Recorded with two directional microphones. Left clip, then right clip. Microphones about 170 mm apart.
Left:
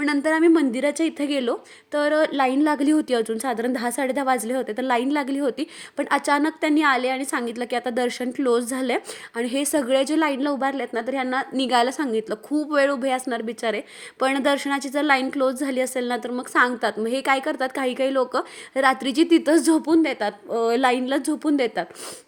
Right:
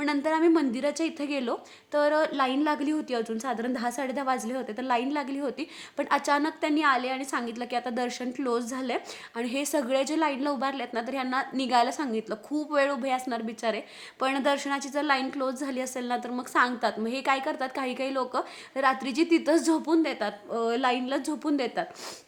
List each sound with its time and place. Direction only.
0.0 s a woman's voice: 20° left (ahead or behind)